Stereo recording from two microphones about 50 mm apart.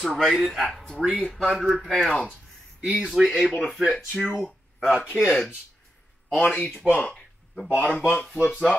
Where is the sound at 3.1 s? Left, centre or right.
Centre.